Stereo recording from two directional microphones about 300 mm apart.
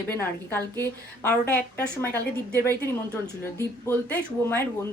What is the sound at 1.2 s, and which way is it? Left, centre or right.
Speech, centre.